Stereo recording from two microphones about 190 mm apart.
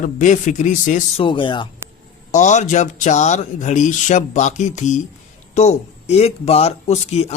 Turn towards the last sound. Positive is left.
turn(degrees=35)  # may be behind; listen again after turning